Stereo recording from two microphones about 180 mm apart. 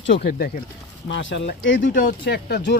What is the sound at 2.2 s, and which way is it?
Speech, 70° left (ahead or behind).